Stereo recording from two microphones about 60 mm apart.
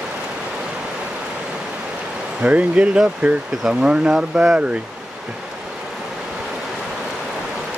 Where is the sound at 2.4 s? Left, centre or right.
Right.